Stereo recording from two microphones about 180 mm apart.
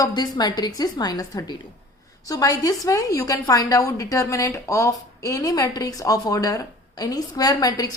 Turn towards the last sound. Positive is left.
turn(degrees=20)  # may be behind; listen again after turning